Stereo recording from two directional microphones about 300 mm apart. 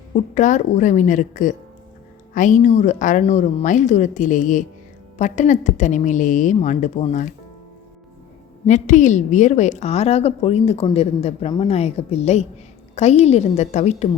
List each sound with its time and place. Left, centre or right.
0.1 s a woman's voice: left
8.6 s a woman's voice: left